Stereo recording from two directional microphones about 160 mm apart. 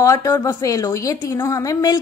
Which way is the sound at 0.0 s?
20° left (ahead or behind).